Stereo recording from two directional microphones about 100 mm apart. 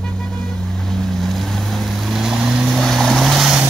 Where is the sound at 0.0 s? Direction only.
5° left (ahead or behind).